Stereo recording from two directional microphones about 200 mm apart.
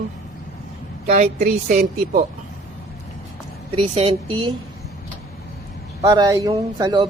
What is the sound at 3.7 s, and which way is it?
Speech, 25° right (ahead or behind).